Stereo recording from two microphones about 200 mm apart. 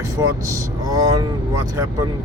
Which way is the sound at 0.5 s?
20° right (ahead or behind).